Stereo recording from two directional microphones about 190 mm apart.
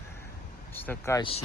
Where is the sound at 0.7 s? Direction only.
10° left (ahead or behind).